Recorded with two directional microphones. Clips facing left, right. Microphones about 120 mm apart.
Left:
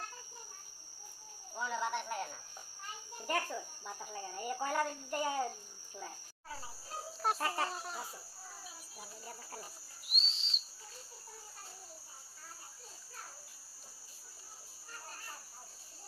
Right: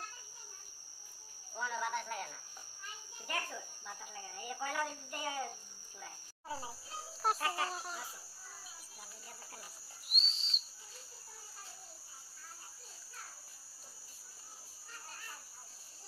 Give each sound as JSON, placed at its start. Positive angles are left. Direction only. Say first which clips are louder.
{"t": 1.6, "sound": "speech", "louder": "left 1 dB", "side_deg": 20}
{"t": 3.3, "sound": "cricket", "louder": "left 5 dB", "side_deg": 40}
{"t": 7.3, "sound": "speech", "louder": "left 1 dB", "side_deg": 40}
{"t": 7.7, "sound": "speech", "louder": "even", "side_deg": 0}
{"t": 10.0, "sound": "bird", "louder": "even", "side_deg": -40}